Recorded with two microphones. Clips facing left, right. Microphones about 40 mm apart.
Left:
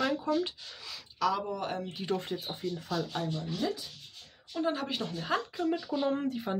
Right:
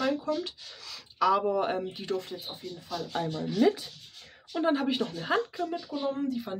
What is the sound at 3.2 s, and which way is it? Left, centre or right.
Speech, right.